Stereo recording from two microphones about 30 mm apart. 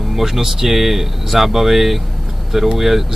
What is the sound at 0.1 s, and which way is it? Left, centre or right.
Speech, centre.